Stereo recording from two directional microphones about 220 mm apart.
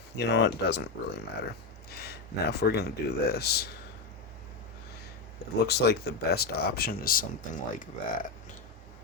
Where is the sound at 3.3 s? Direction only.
45° left (ahead or behind).